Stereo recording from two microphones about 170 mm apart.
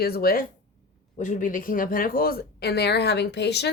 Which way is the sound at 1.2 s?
50° left (ahead or behind).